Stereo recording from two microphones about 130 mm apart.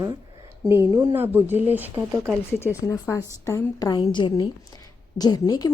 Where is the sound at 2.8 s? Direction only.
25° left (ahead or behind).